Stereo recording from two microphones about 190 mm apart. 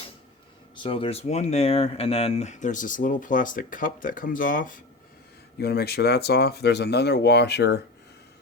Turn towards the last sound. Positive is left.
turn(degrees=60)  # may be behind; listen again after turning